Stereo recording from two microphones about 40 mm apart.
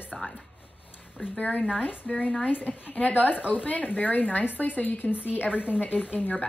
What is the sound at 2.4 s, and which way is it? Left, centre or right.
Speech, left.